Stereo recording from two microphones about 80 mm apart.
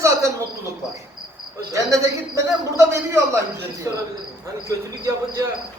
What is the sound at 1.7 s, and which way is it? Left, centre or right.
A man's voice, right.